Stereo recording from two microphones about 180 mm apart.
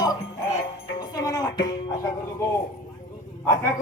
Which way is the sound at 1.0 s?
20° left (ahead or behind).